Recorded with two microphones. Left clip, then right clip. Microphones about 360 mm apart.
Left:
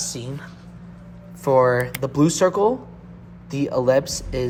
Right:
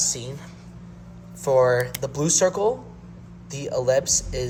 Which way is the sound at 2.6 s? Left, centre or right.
Left.